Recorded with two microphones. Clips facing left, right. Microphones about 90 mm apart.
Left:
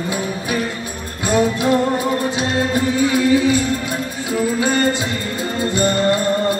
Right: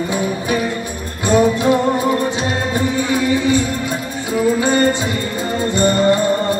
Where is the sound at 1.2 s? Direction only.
5° left (ahead or behind).